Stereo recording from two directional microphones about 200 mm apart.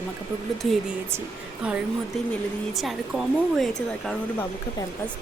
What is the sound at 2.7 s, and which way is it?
Speech, centre (ahead or behind).